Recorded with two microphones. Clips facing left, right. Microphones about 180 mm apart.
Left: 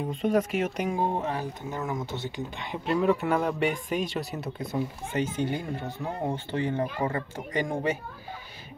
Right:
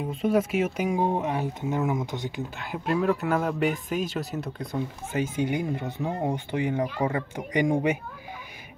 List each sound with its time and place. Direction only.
0.1 s speech: 5° right (ahead or behind)
5.1 s speech: 10° right (ahead or behind)